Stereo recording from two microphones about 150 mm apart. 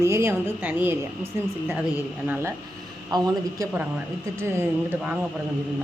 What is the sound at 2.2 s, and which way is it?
A woman's voice, 15° right (ahead or behind).